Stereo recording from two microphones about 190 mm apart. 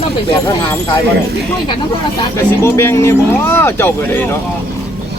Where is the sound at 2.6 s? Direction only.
15° left (ahead or behind).